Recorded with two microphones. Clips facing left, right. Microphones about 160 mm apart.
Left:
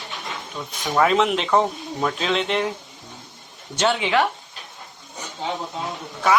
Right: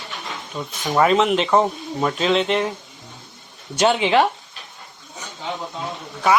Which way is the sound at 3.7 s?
20° right (ahead or behind).